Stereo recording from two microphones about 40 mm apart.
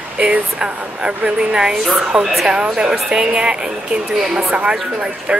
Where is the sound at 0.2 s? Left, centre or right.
Right.